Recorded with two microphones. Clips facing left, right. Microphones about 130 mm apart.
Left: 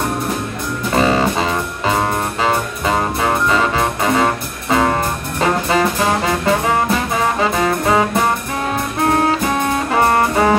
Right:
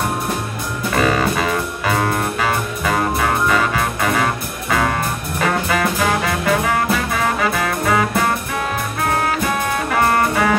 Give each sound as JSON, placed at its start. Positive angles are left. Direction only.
{"t": 0.9, "sound": "music", "side_deg": 25}
{"t": 5.4, "sound": "brass instrument", "side_deg": 25}
{"t": 9.9, "sound": "music", "side_deg": 25}